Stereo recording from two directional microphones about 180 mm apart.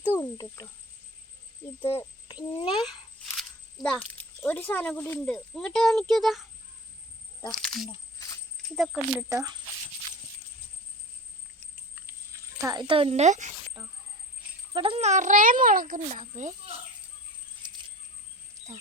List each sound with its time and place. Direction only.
0.0 s speech: 15° left (ahead or behind)
1.8 s speech: 15° left (ahead or behind)
2.2 s a child's voice: 25° left (ahead or behind)
3.8 s speech: 5° left (ahead or behind)
9.3 s speech: 20° right (ahead or behind)
11.9 s a sound: 15° right (ahead or behind); by 13.7 s 40° right (ahead or behind)
14.7 s a child's voice: 30° right (ahead or behind)
17.6 s a sound: 25° right (ahead or behind)